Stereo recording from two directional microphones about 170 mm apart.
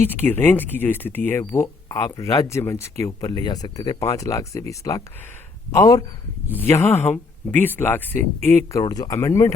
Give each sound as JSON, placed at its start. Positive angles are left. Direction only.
{"t": 0.0, "sound": "speech", "side_deg": 10}
{"t": 8.8, "sound": "speech", "side_deg": 20}